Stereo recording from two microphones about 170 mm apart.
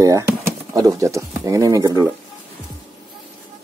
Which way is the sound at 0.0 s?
20° right (ahead or behind).